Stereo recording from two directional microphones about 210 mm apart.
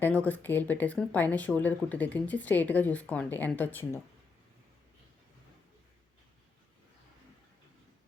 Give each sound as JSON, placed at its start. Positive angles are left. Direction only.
{"t": 0.0, "sound": "speech", "side_deg": 5}